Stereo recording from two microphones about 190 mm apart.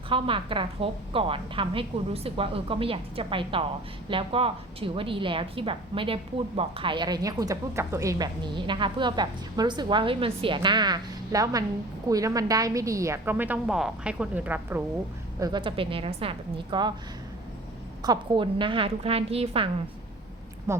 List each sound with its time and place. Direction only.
0.1 s a woman's voice: 25° right (ahead or behind); by 14.8 s 10° right (ahead or behind)
15.4 s a woman's voice: 20° right (ahead or behind)
18.0 s a woman's voice: 25° right (ahead or behind)
20.7 s a woman's voice: 15° right (ahead or behind)